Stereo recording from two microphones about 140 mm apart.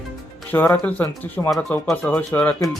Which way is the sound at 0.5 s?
15° left (ahead or behind).